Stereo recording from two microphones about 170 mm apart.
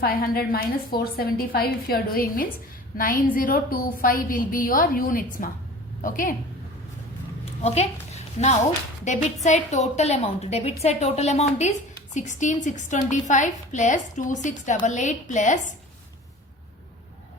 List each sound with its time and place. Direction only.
0.0 s a woman's voice: 60° left (ahead or behind)
7.6 s a woman's voice: 40° left (ahead or behind)